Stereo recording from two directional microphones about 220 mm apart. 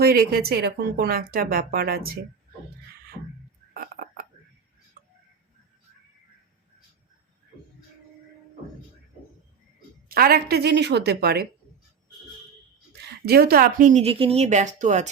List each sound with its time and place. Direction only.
0.0 s speech: 45° right (ahead or behind)
3.8 s frog: 40° right (ahead or behind)
10.1 s speech: 45° right (ahead or behind)
13.0 s speech: 45° right (ahead or behind)